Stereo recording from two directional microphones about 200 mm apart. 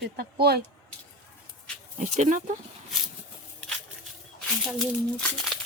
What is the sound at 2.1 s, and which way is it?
Speech, 35° right (ahead or behind).